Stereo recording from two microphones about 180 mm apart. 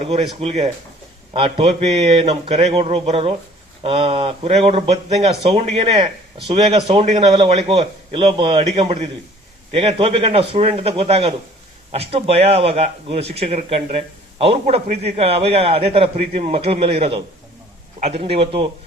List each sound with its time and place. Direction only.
0.0 s speech: 35° right (ahead or behind)